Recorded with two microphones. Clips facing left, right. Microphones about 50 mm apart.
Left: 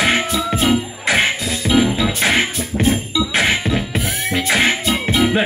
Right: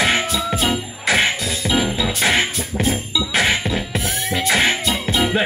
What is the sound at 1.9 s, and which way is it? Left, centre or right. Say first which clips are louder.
Jingle bell: left 2 dB; centre.